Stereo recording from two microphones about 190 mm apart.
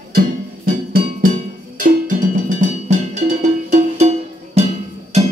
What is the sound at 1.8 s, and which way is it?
Cowbell, 45° right (ahead or behind).